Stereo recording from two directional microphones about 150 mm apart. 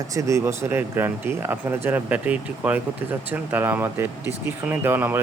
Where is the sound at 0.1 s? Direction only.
20° right (ahead or behind).